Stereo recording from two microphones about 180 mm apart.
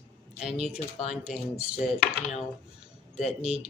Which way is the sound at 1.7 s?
40° left (ahead or behind).